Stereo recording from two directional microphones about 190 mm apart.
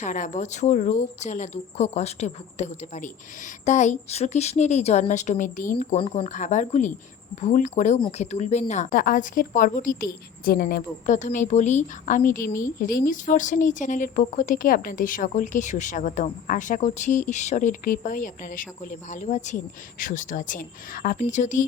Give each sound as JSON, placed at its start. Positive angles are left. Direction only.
{"t": 0.0, "sound": "speech", "side_deg": 40}